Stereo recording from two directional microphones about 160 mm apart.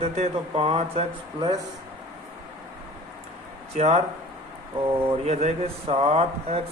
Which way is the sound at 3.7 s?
40° right (ahead or behind).